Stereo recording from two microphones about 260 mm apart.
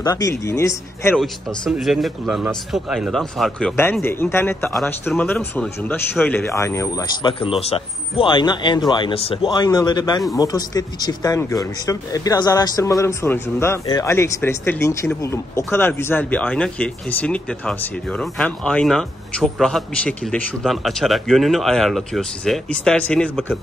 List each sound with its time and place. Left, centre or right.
0.0 s speech: centre